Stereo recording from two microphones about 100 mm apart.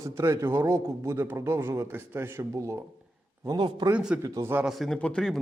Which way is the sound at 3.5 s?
50° right (ahead or behind).